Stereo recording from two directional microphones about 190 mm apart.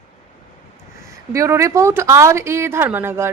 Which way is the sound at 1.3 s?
15° right (ahead or behind).